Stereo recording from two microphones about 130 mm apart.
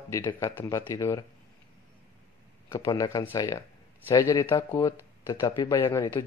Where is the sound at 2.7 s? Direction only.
30° left (ahead or behind).